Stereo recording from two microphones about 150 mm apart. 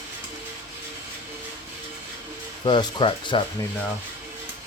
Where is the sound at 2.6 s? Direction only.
30° left (ahead or behind).